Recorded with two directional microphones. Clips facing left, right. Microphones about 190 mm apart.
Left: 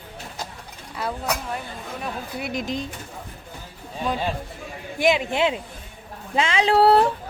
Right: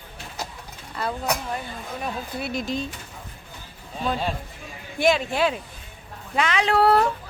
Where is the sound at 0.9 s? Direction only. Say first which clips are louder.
Right 1 dB; 5° left (ahead or behind).